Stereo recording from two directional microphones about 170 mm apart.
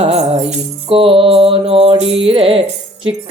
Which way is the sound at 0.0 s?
40° right (ahead or behind).